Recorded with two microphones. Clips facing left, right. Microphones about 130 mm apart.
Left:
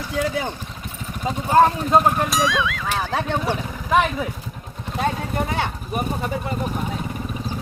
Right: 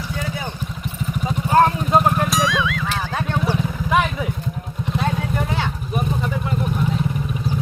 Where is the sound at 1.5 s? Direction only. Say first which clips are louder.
Even; centre (ahead or behind).